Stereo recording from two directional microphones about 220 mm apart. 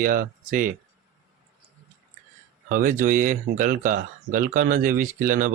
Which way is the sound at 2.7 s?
35° right (ahead or behind).